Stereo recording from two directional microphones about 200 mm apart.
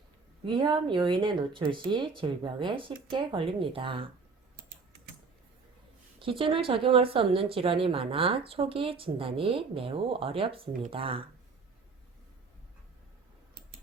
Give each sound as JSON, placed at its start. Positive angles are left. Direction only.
{"t": 0.4, "sound": "speech", "side_deg": -25}
{"t": 6.1, "sound": "speech", "side_deg": -25}